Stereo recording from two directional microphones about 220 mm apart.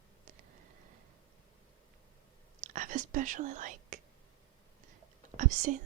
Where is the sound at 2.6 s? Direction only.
35° right (ahead or behind).